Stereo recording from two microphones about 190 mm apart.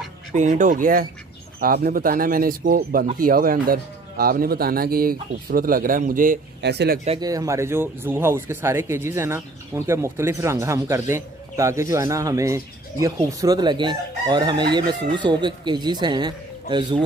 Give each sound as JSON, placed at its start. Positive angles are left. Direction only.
{"t": 0.4, "sound": "speech", "side_deg": -40}
{"t": 7.2, "sound": "a man's voice", "side_deg": -20}